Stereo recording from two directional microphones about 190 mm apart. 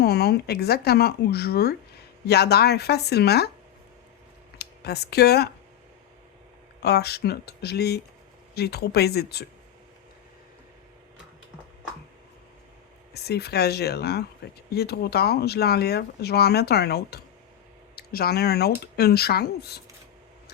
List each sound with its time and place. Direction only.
0.0 s speech: 55° left (ahead or behind)
4.5 s speech: 60° left (ahead or behind)
6.8 s speech: 55° left (ahead or behind)
13.1 s speech: 55° left (ahead or behind)